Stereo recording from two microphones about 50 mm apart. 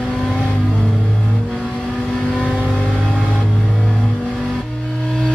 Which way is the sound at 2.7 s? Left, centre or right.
Centre.